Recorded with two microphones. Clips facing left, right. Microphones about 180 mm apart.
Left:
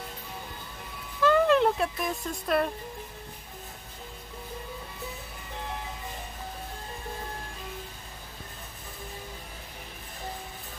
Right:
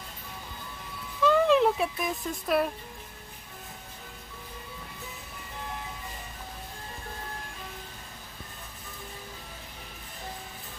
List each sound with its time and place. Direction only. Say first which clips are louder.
1.2 s speech: even; centre (ahead or behind)